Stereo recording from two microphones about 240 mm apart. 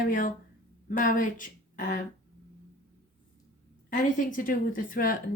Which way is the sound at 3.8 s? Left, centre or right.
Left.